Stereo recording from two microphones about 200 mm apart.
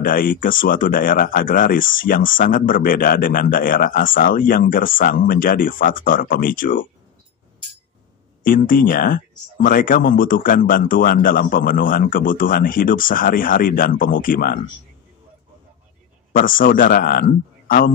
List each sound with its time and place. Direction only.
0.0 s speech: 45° left (ahead or behind)
8.5 s speech: 45° left (ahead or behind)
16.3 s speech: 45° left (ahead or behind)